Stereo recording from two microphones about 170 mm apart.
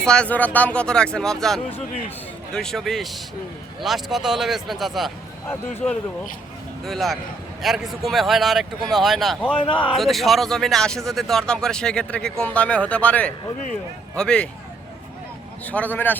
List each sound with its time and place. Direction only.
0.0 s speech: 5° left (ahead or behind)
9.6 s speech: 30° left (ahead or behind)
9.9 s speech: centre (ahead or behind)
15.6 s a man's voice: 10° left (ahead or behind)